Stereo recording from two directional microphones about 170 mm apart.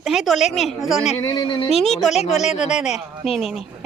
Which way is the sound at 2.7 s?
Centre (ahead or behind).